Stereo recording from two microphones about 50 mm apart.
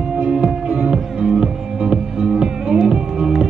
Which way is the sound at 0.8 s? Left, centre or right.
Centre.